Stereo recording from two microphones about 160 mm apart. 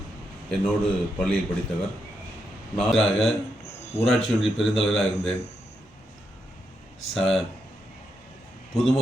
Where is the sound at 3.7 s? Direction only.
40° left (ahead or behind).